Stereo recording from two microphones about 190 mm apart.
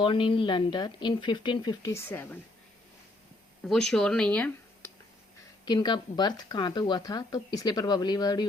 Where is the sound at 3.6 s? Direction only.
5° left (ahead or behind).